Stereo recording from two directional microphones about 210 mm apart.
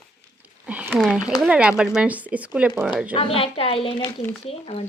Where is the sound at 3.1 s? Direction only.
25° left (ahead or behind).